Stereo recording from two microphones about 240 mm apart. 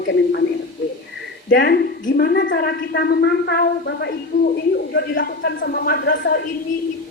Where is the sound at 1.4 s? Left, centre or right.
Left.